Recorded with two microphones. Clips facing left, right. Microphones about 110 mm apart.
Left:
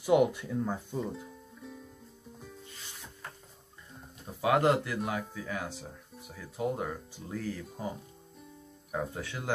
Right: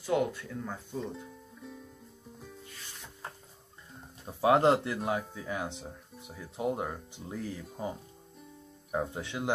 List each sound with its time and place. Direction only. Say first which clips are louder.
0.0 s speech: left 5 dB; 15° left (ahead or behind)
1.0 s music: left 1 dB; centre (ahead or behind)
4.4 s speech: right 2 dB; 30° right (ahead or behind)
8.9 s speech: right 2 dB; 20° right (ahead or behind)